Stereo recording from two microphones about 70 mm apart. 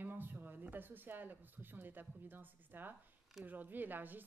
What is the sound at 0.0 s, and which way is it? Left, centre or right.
A woman's voice, right.